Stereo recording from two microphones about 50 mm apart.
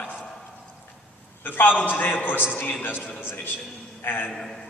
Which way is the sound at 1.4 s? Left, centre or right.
Left.